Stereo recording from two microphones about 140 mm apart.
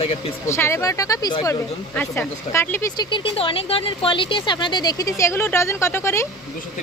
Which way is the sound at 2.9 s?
30° left (ahead or behind).